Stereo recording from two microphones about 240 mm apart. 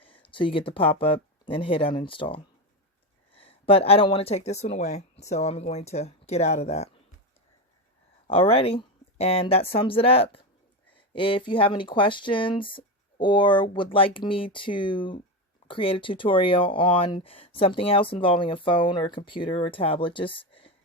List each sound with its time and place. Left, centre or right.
0.2 s speech: left
8.3 s speech: left